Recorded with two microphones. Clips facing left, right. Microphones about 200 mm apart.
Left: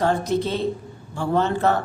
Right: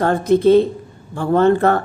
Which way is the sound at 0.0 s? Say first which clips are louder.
Right 7 dB; 55° right (ahead or behind).